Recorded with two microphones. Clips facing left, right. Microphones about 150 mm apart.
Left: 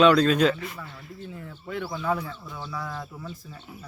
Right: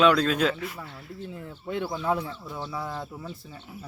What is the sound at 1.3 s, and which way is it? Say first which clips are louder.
Speech: right 2 dB; 25° right (ahead or behind).